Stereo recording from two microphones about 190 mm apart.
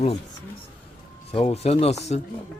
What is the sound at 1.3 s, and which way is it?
Speech, 35° left (ahead or behind).